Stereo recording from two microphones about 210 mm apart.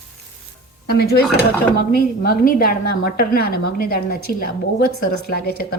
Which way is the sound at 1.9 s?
45° left (ahead or behind).